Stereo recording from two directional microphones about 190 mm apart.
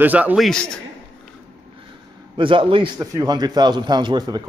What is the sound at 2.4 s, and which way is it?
A man's voice, 25° right (ahead or behind).